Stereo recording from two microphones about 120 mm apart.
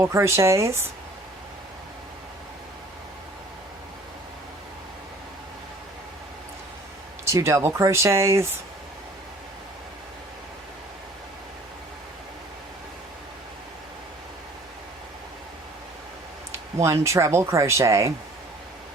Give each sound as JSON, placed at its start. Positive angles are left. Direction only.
{"t": 0.0, "sound": "speech", "side_deg": -25}
{"t": 7.3, "sound": "speech", "side_deg": -25}
{"t": 16.7, "sound": "speech", "side_deg": -25}